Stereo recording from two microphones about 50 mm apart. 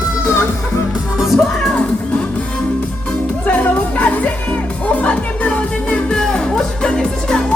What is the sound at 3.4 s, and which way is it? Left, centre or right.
Music, left.